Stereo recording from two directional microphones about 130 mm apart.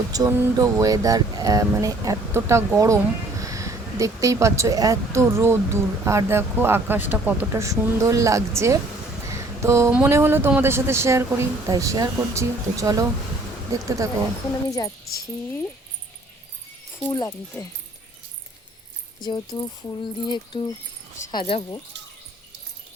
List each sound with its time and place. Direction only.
0.1 s speech: 30° right (ahead or behind)
9.3 s a sound: 20° right (ahead or behind)
9.9 s speech: 20° right (ahead or behind)
14.7 s a woman's voice: 25° left (ahead or behind)
17.1 s a woman's voice: 30° left (ahead or behind)
19.2 s speech: 35° left (ahead or behind)